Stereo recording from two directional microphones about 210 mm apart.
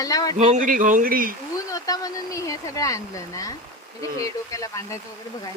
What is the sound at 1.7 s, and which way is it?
Speech, 15° left (ahead or behind).